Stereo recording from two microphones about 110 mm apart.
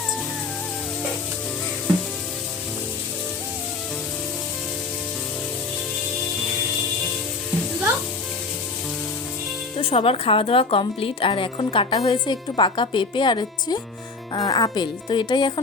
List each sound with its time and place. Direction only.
9.7 s a woman's voice: 60° left (ahead or behind)
14.3 s speech: 35° left (ahead or behind)